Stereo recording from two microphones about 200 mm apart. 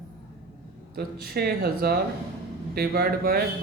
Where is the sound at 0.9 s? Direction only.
50° right (ahead or behind).